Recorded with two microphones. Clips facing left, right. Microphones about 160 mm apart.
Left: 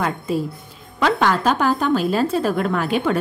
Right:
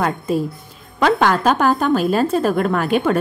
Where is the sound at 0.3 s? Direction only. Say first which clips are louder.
Right 3 dB; 45° right (ahead or behind).